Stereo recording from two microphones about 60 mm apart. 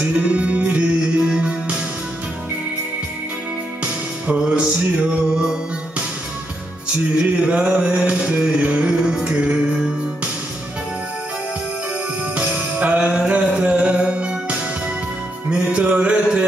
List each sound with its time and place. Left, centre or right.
0.0 s music: centre
4.4 s music: centre
7.2 s a sound: centre
12.4 s music: right